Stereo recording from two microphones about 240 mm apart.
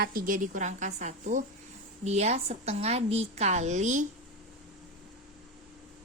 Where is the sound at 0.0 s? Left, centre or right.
Right.